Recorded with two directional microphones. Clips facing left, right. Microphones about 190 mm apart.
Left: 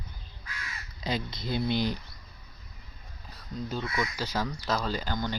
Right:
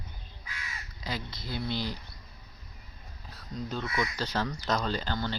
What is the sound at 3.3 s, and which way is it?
Speech, centre (ahead or behind).